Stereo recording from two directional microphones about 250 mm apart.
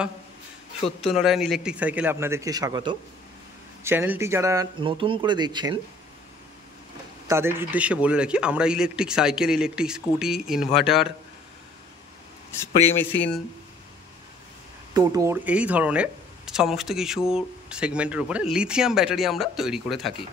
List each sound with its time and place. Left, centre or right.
0.8 s speech: centre
7.2 s speech: centre
12.8 s speech: centre
15.0 s speech: centre